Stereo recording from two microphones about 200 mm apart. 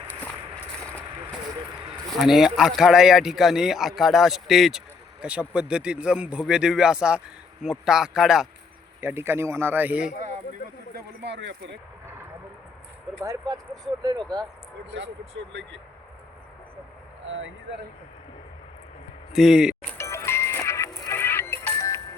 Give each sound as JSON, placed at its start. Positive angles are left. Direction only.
{"t": 2.1, "sound": "speech", "side_deg": 0}
{"t": 10.9, "sound": "speech", "side_deg": -60}
{"t": 13.2, "sound": "speech", "side_deg": -20}
{"t": 17.2, "sound": "speech", "side_deg": -70}
{"t": 19.3, "sound": "speech", "side_deg": 0}
{"t": 20.0, "sound": "music", "side_deg": 15}